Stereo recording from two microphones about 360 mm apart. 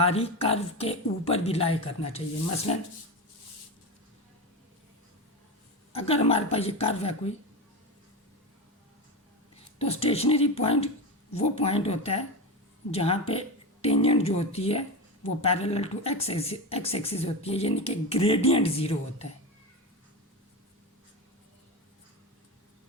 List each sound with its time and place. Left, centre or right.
0.0 s speech: centre
5.9 s speech: centre
9.7 s speech: centre